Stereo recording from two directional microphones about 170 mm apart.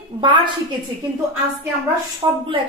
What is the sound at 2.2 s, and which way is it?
Speech, 25° right (ahead or behind).